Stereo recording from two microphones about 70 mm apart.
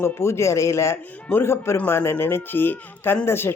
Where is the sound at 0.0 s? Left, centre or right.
Left.